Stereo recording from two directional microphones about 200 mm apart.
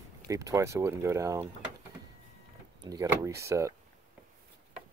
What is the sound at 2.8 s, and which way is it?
Speech, 20° right (ahead or behind).